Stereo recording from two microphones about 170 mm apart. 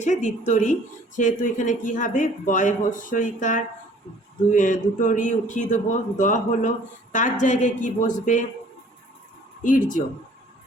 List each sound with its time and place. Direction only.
0.0 s speech: 45° left (ahead or behind)
9.6 s speech: 50° left (ahead or behind)